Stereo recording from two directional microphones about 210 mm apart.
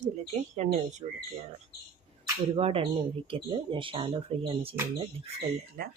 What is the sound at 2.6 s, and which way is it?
Speech, 30° right (ahead or behind).